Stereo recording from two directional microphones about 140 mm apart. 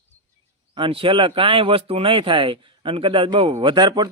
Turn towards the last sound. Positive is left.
turn(degrees=-30)  # may be behind; listen again after turning